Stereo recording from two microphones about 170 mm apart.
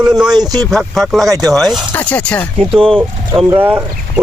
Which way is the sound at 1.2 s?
20° right (ahead or behind).